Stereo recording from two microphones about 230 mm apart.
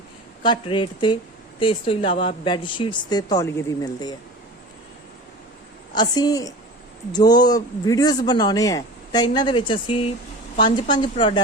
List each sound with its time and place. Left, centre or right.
0.4 s speech: centre
5.9 s a man's voice: centre